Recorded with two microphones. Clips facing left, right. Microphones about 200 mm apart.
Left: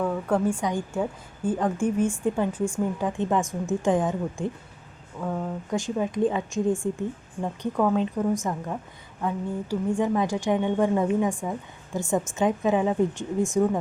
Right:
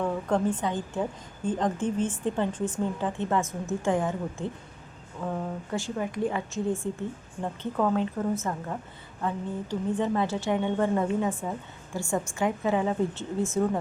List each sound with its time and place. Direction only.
0.0 s speech: 5° left (ahead or behind)
7.4 s speech: 5° left (ahead or behind)